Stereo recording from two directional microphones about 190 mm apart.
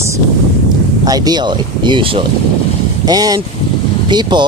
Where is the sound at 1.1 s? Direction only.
20° right (ahead or behind).